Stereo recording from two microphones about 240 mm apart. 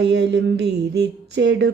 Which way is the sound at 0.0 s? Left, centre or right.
Right.